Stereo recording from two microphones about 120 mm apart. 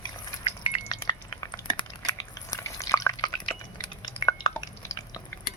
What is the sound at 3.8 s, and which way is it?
Drip, 40° left (ahead or behind).